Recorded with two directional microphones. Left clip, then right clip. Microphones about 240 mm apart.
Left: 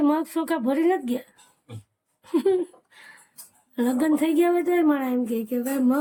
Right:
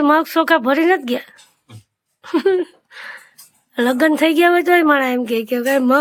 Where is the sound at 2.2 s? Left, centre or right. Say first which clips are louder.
Right 6 dB; centre.